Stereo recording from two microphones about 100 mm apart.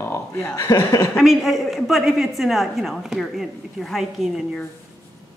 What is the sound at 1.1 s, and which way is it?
A woman's voice, centre (ahead or behind).